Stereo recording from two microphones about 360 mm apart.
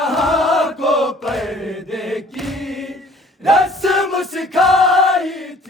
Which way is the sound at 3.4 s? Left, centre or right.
Centre.